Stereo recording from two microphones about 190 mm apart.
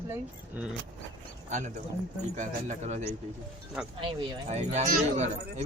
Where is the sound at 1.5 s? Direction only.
40° right (ahead or behind).